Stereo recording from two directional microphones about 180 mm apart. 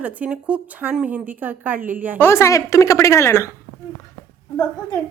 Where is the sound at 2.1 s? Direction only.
15° left (ahead or behind).